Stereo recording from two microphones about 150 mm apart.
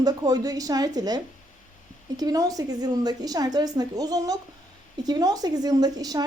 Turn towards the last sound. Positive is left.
turn(degrees=-25)  # may be behind; listen again after turning